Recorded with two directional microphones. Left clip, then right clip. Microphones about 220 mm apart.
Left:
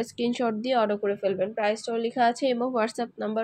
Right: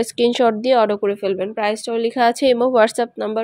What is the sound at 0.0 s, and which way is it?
Speech, 45° right (ahead or behind).